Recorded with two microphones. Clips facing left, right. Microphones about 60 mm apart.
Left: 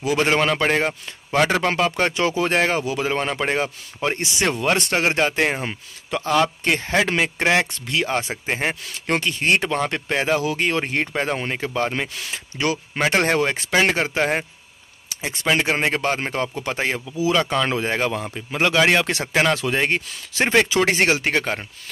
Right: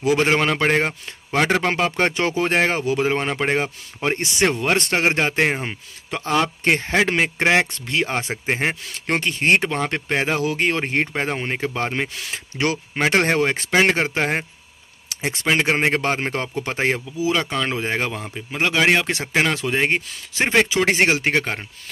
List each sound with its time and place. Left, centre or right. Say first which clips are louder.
0.1 s speech: even; right
13.1 s speech: right 1 dB; right
15.6 s speech: right 1 dB; right
17.2 s speech: left 3 dB; centre
17.5 s speech: left 2 dB; centre
17.7 s speech: left 1 dB; centre
18.1 s speech: left 3 dB; centre
20.8 s speech: right 1 dB; right